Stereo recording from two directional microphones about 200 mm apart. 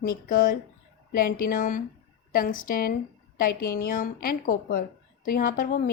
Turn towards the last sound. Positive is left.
turn(degrees=45)  # may be behind; listen again after turning